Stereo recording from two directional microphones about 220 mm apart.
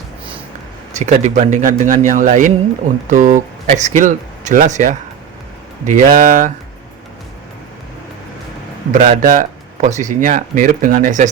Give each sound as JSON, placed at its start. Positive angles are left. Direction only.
{"t": 0.9, "sound": "speech", "side_deg": -30}
{"t": 8.9, "sound": "speech", "side_deg": -35}